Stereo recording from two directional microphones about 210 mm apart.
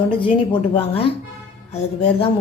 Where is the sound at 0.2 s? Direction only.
25° left (ahead or behind).